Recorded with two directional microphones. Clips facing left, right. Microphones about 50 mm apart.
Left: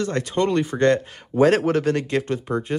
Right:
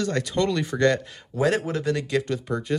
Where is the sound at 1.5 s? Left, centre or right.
Left.